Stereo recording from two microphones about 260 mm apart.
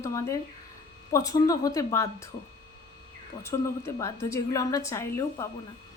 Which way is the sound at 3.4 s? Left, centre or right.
Centre.